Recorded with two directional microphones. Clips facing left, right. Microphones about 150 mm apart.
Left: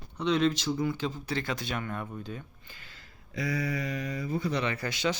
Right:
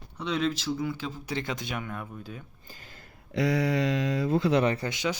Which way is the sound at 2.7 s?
45° right (ahead or behind).